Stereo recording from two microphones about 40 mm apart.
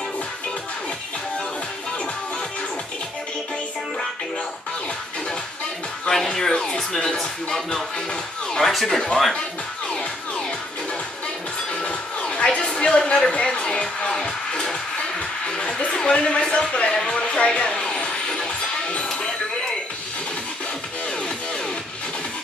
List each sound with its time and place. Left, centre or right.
6.0 s speech: centre
11.7 s music: left